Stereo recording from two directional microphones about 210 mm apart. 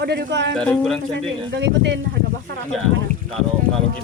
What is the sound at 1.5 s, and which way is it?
Speech, 55° right (ahead or behind).